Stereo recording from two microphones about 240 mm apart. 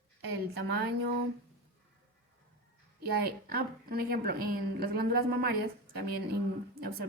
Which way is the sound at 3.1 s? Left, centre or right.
Right.